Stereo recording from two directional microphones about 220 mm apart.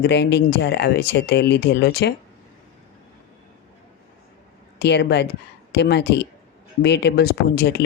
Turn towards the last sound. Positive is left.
turn(degrees=45)  # may be behind; listen again after turning